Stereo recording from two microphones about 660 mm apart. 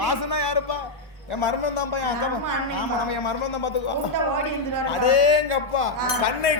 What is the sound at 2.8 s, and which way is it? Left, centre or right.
Speech, left.